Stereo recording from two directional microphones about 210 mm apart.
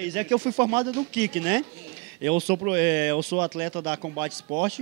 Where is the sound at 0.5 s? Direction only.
20° right (ahead or behind).